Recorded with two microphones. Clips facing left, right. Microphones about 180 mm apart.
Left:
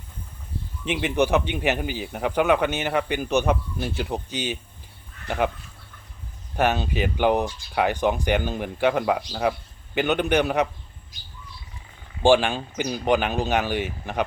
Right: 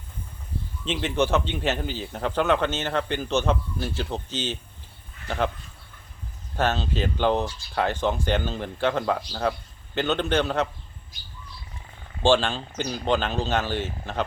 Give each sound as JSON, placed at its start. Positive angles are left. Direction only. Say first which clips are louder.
{"t": 0.9, "sound": "speech", "louder": "left 2 dB", "side_deg": 15}
{"t": 6.6, "sound": "speech", "louder": "left 2 dB", "side_deg": 15}
{"t": 12.2, "sound": "speech", "louder": "left 3 dB", "side_deg": 15}